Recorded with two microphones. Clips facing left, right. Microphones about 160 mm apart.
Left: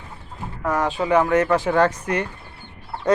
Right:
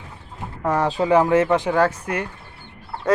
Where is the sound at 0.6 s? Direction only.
30° right (ahead or behind).